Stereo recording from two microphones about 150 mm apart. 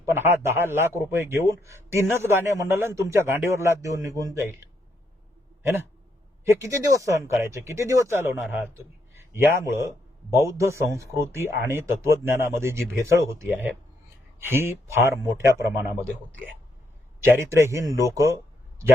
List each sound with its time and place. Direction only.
0.0 s a man's voice: 15° right (ahead or behind)
6.4 s a man's voice: 20° right (ahead or behind)
17.3 s a man's voice: 15° right (ahead or behind)